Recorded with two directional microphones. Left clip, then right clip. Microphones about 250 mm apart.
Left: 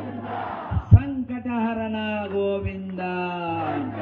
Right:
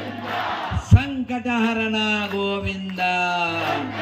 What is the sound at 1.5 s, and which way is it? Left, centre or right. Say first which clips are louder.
Mantra: right 5 dB; right.